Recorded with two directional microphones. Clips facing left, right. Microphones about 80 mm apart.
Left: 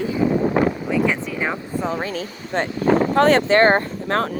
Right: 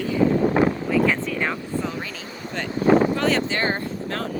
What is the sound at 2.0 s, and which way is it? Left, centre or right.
Speech, left.